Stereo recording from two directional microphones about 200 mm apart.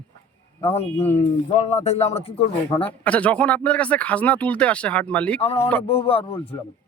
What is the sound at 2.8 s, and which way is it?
Speech, 5° left (ahead or behind).